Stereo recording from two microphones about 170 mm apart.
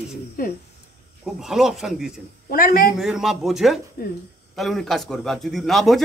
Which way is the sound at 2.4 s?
55° left (ahead or behind).